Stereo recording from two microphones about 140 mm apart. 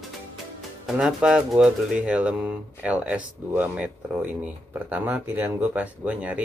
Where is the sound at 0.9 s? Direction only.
5° right (ahead or behind).